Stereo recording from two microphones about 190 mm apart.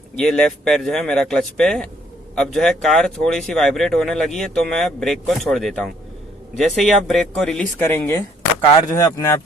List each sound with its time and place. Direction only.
0.2 s speech: 5° left (ahead or behind)